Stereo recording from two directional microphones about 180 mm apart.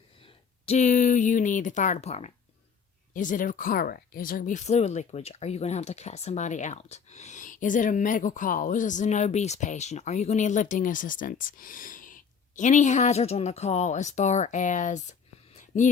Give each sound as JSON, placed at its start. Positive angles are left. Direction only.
{"t": 0.6, "sound": "speech", "side_deg": 40}
{"t": 3.1, "sound": "speech", "side_deg": 45}